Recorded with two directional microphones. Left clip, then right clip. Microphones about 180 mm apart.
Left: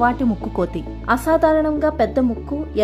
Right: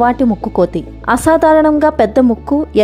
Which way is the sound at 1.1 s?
40° right (ahead or behind).